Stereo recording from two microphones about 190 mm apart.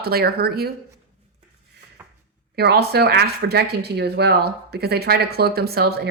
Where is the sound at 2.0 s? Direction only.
10° right (ahead or behind).